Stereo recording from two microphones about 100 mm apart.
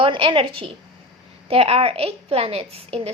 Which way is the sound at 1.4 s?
80° right.